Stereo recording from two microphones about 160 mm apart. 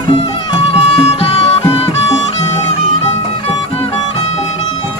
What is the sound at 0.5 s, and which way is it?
Music, 35° left (ahead or behind).